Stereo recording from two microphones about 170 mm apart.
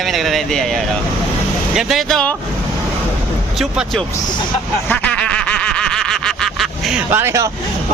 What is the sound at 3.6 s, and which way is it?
Speech, centre (ahead or behind).